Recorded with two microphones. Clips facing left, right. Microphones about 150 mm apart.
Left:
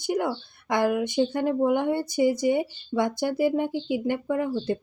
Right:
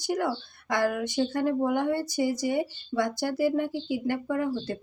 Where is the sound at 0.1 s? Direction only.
20° left (ahead or behind).